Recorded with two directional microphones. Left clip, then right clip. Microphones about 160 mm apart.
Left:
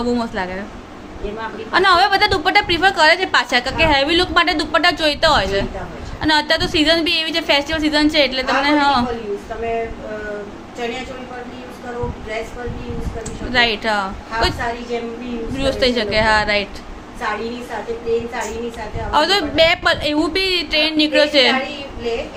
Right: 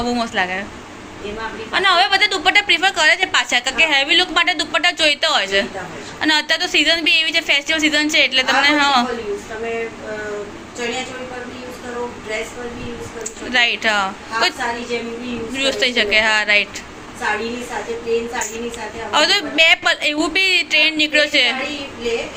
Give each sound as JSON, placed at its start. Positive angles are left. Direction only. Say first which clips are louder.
{"t": 0.0, "sound": "a woman's voice", "louder": "right 2 dB", "side_deg": 40}
{"t": 1.7, "sound": "a woman's voice", "louder": "left 1 dB", "side_deg": 40}
{"t": 13.5, "sound": "a woman's voice", "louder": "right 1 dB", "side_deg": 25}
{"t": 15.5, "sound": "a woman's voice", "louder": "even", "side_deg": 35}
{"t": 19.1, "sound": "a woman's voice", "louder": "even", "side_deg": 30}